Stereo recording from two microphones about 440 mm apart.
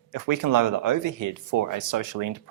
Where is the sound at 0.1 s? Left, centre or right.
Right.